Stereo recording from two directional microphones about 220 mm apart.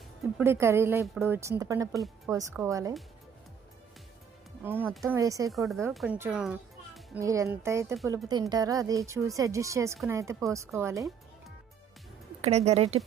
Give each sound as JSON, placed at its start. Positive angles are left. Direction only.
{"t": 0.3, "sound": "speech", "side_deg": -10}
{"t": 1.9, "sound": "speech", "side_deg": 0}
{"t": 2.3, "sound": "speech", "side_deg": -15}
{"t": 4.6, "sound": "speech", "side_deg": -10}
{"t": 5.5, "sound": "a child's voice", "side_deg": 0}
{"t": 10.9, "sound": "music", "side_deg": 0}
{"t": 12.4, "sound": "speech", "side_deg": -30}